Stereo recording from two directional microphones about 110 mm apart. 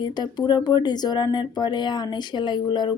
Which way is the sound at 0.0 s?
40° left (ahead or behind).